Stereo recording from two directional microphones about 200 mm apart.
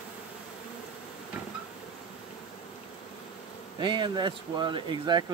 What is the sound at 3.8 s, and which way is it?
Speech, 20° right (ahead or behind).